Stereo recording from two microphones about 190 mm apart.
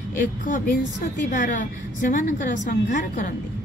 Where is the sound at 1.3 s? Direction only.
45° left (ahead or behind).